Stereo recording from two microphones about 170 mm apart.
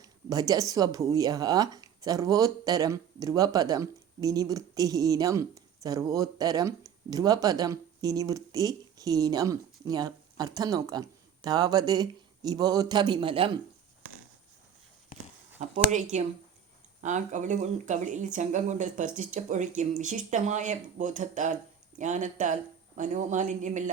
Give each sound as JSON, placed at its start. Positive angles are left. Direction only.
{"t": 0.0, "sound": "speech", "side_deg": -20}
{"t": 16.1, "sound": "speech", "side_deg": -40}